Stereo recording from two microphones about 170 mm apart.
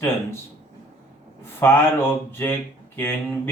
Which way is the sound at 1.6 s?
15° left (ahead or behind).